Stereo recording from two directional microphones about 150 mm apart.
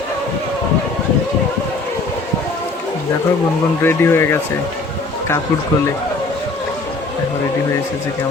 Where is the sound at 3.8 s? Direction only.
15° left (ahead or behind).